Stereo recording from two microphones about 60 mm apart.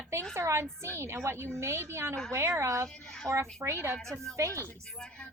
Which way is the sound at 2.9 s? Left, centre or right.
Centre.